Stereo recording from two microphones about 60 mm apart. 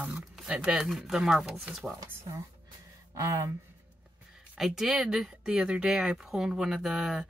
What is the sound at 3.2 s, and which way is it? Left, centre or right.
Speech, right.